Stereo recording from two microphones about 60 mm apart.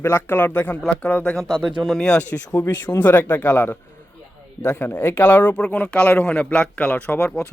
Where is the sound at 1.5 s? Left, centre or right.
Centre.